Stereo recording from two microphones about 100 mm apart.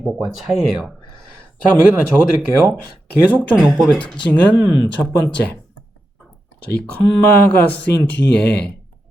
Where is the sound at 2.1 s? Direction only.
15° right (ahead or behind).